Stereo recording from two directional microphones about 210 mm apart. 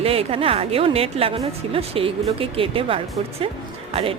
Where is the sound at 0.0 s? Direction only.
25° right (ahead or behind).